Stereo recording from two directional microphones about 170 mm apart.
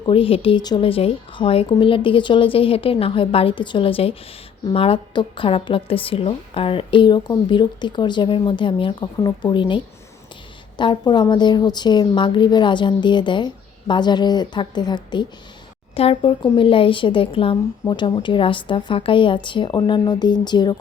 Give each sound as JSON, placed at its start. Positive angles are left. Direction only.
{"t": 0.0, "sound": "a woman's voice", "side_deg": 35}